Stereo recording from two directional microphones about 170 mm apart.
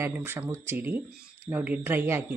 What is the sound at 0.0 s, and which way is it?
Speech, 15° right (ahead or behind).